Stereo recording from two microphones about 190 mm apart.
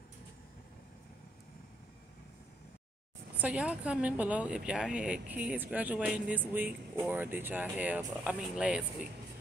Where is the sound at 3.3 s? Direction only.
5° right (ahead or behind).